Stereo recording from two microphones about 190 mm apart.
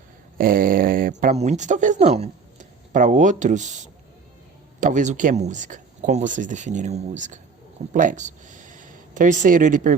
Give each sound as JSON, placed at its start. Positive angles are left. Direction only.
{"t": 0.3, "sound": "speech", "side_deg": -50}